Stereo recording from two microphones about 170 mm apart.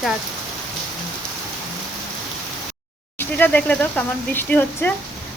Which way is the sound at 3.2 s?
10° left (ahead or behind).